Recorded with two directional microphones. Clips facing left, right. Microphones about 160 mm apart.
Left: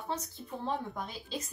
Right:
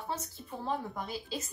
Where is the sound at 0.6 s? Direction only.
5° right (ahead or behind).